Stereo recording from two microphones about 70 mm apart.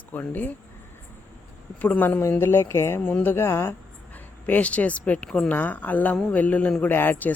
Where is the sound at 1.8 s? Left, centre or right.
Left.